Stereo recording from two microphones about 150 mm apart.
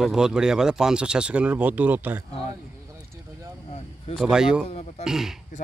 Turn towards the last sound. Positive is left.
turn(degrees=-5)  # may be behind; listen again after turning